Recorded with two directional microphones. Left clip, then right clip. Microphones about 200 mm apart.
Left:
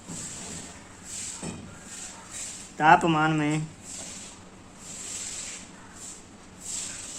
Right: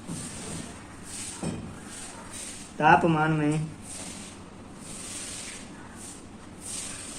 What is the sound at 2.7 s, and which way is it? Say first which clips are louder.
Speech: left 1 dB; 50° left (ahead or behind).